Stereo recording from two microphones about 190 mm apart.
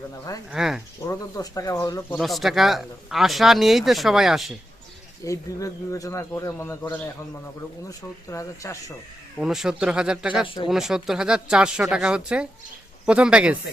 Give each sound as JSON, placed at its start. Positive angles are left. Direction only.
{"t": 0.5, "sound": "speech", "side_deg": 0}
{"t": 1.0, "sound": "speech", "side_deg": 20}
{"t": 2.1, "sound": "speech", "side_deg": 0}
{"t": 5.2, "sound": "speech", "side_deg": 15}
{"t": 9.4, "sound": "speech", "side_deg": -5}
{"t": 10.4, "sound": "speech", "side_deg": 25}
{"t": 10.7, "sound": "speech", "side_deg": 0}